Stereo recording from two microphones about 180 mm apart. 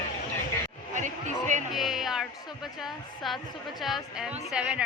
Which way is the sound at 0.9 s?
40° right (ahead or behind).